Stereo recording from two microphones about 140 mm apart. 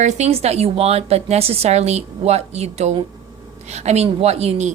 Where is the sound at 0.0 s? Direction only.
55° right (ahead or behind).